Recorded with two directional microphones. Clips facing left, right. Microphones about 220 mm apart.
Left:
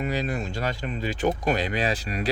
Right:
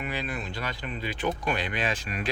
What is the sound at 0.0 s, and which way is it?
Speech, 40° left (ahead or behind).